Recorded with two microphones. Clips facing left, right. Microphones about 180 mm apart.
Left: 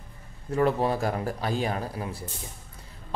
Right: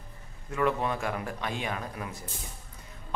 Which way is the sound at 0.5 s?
35° left (ahead or behind).